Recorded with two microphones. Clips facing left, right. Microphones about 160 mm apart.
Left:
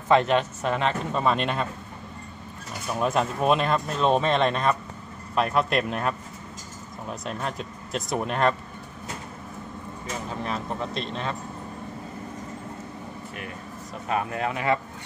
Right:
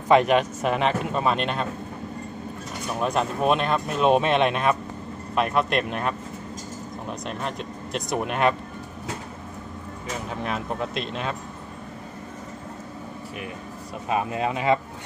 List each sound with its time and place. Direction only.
0.1 s speech: 15° right (ahead or behind)
1.1 s speech: centre (ahead or behind)
3.0 s speech: centre (ahead or behind)
14.0 s speech: 20° right (ahead or behind)